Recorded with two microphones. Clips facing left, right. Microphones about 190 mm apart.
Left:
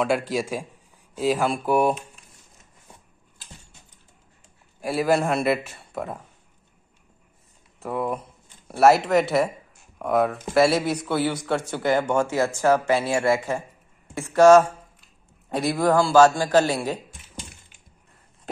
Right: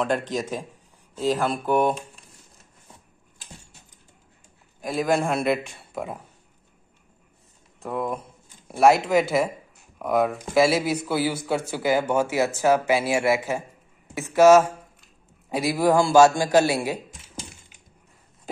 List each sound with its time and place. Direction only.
0.0 s a man's voice: 5° left (ahead or behind)
4.8 s a man's voice: 5° left (ahead or behind)
7.8 s a man's voice: 5° left (ahead or behind)